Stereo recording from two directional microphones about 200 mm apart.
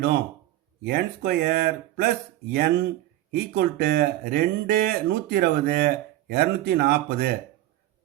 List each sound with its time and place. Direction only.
0.9 s speech: 50° right (ahead or behind)